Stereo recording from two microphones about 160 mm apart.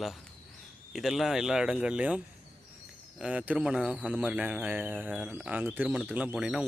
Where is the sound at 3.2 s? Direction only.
5° right (ahead or behind).